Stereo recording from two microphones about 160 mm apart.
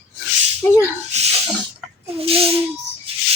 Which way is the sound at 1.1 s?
45° right (ahead or behind).